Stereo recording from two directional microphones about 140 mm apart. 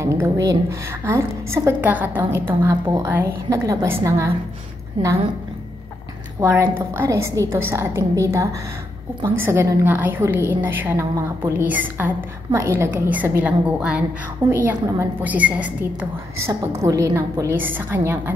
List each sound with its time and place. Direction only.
0.0 s a woman's voice: 20° right (ahead or behind)
5.0 s a woman's voice: 40° right (ahead or behind)
6.4 s a woman's voice: 15° right (ahead or behind)
16.8 s a woman's voice: 25° right (ahead or behind)